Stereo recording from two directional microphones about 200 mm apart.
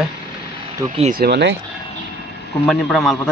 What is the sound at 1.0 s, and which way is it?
Speech, 45° right (ahead or behind).